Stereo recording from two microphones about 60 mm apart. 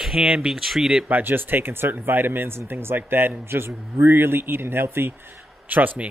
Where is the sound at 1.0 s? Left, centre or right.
Right.